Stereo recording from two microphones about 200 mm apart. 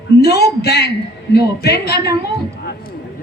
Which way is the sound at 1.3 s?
55° left (ahead or behind).